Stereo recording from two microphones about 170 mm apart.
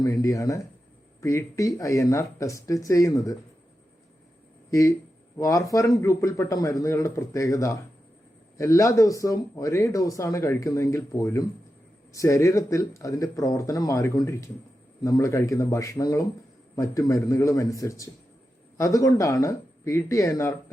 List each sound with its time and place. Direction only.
0.0 s speech: 20° left (ahead or behind)
4.7 s speech: 20° left (ahead or behind)